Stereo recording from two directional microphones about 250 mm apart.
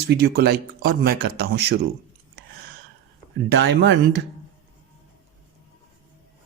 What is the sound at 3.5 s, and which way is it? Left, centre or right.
Speech, right.